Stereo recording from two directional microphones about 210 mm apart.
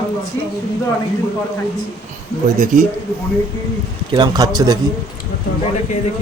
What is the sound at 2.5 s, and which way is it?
Speech, 40° right (ahead or behind).